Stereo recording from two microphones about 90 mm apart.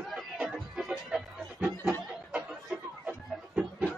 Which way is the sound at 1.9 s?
10° right (ahead or behind).